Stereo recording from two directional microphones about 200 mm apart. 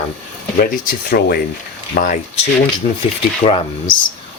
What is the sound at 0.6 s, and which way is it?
Speech, 45° left (ahead or behind).